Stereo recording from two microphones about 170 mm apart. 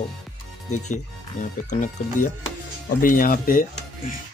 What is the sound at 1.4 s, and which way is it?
Speech, 45° left (ahead or behind).